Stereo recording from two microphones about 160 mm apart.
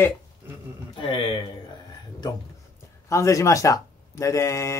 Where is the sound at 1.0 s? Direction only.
35° left (ahead or behind).